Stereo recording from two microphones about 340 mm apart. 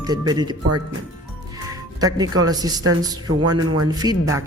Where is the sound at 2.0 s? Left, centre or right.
Centre.